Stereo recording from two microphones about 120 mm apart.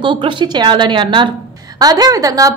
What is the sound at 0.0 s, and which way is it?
A woman's voice, 40° right (ahead or behind).